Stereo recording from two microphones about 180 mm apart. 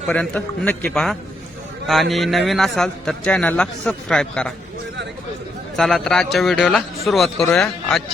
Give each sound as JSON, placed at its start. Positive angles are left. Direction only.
{"t": 0.1, "sound": "a man's voice", "side_deg": 5}
{"t": 5.7, "sound": "a man's voice", "side_deg": 0}